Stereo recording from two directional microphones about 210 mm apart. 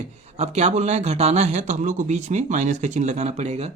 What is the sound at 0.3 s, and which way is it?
Speech, 30° right (ahead or behind).